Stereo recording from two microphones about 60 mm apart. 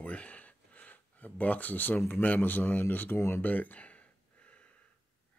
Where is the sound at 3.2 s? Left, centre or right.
Left.